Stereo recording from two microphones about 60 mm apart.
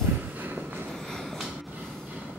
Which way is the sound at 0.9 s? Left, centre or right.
Centre.